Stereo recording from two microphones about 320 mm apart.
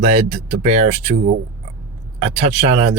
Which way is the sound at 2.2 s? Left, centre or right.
Centre.